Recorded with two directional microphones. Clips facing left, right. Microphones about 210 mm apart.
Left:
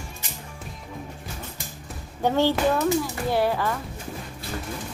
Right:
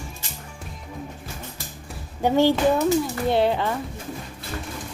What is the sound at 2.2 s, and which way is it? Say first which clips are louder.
Speech: right 3 dB; 15° right (ahead or behind).